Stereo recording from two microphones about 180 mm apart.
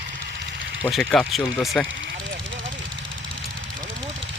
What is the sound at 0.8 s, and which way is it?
Speech, centre (ahead or behind).